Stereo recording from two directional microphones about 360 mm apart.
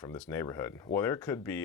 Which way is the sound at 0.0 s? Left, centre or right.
Centre.